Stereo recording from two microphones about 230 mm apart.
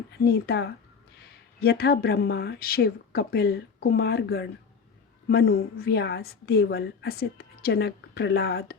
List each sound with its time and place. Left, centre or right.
0.3 s a woman's voice: left